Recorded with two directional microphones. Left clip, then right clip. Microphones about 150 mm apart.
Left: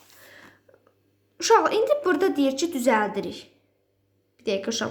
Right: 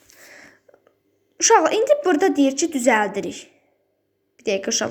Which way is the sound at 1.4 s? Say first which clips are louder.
Right 4 dB; 20° right (ahead or behind).